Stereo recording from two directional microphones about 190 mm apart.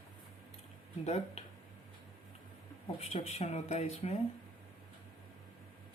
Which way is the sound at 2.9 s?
35° left (ahead or behind).